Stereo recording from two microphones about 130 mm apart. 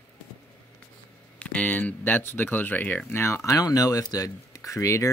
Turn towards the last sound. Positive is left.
turn(degrees=25)  # may be behind; listen again after turning